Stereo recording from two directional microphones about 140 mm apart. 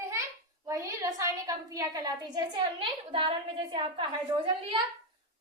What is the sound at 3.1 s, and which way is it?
Speech, 40° right (ahead or behind).